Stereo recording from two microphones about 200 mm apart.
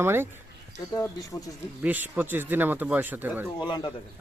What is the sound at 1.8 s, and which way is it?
Speech, 10° right (ahead or behind).